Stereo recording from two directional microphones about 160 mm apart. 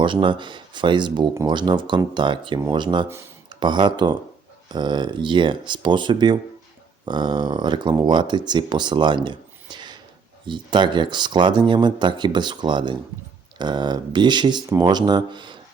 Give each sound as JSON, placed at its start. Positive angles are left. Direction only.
{"t": 0.0, "sound": "speech", "side_deg": -30}